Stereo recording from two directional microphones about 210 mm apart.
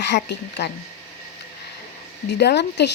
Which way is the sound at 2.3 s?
55° left (ahead or behind).